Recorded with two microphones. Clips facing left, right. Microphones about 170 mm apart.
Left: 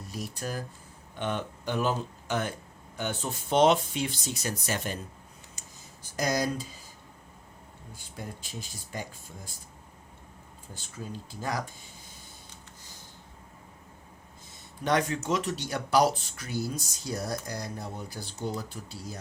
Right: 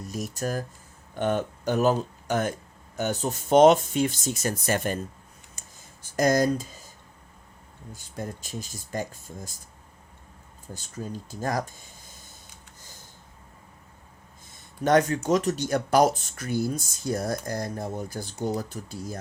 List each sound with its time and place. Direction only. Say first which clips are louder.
0.1 s speech: right 5 dB; 45° right (ahead or behind)
5.5 s a sound: left 1 dB; 50° right (ahead or behind)
7.9 s speech: right 6 dB; 45° right (ahead or behind)
10.8 s speech: right 4 dB; 45° right (ahead or behind)
14.8 s speech: right 6 dB; 45° right (ahead or behind)